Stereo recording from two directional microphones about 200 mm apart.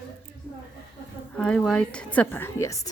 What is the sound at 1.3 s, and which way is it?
A woman's voice, 5° left (ahead or behind).